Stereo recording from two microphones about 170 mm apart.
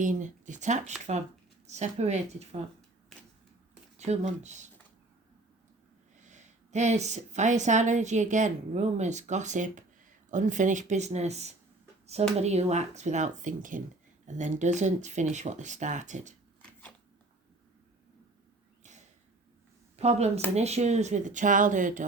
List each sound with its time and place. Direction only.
0.0 s speech: 45° right (ahead or behind)
3.9 s speech: 40° right (ahead or behind)
6.2 s speech: 45° right (ahead or behind)
20.0 s speech: 40° right (ahead or behind)